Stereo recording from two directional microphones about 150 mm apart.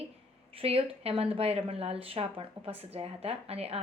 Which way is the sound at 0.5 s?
40° right (ahead or behind).